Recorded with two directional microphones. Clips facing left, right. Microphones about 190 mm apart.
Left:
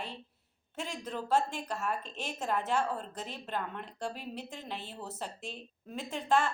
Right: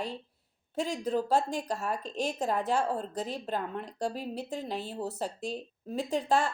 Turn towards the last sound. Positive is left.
turn(degrees=-35)  # may be behind; listen again after turning